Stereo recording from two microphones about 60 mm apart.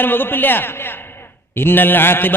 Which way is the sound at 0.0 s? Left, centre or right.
Left.